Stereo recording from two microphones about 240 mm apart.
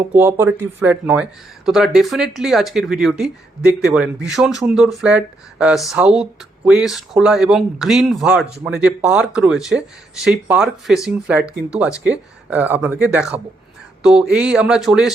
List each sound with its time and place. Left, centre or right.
0.1 s speech: centre